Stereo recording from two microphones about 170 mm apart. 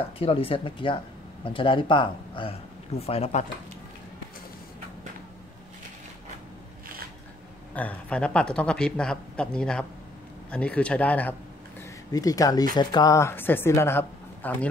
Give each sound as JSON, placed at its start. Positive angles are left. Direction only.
{"t": 0.0, "sound": "speech", "side_deg": 35}
{"t": 7.7, "sound": "a woman's voice", "side_deg": 10}
{"t": 12.1, "sound": "a woman's voice", "side_deg": 20}